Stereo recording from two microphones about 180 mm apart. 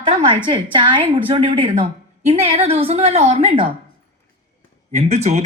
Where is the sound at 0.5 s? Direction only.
25° right (ahead or behind).